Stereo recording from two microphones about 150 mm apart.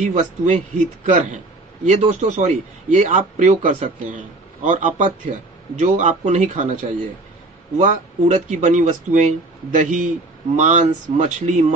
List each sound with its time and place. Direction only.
0.0 s a man's voice: 55° right (ahead or behind)